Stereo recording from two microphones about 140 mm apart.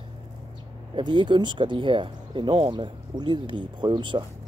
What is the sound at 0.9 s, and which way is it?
Speech, 35° right (ahead or behind).